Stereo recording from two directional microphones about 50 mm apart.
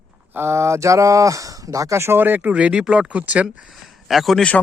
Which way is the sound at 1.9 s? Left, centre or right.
Right.